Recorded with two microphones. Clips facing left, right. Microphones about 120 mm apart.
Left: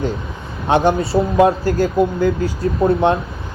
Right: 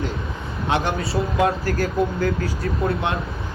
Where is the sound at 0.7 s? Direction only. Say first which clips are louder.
Left 8 dB; 30° left (ahead or behind).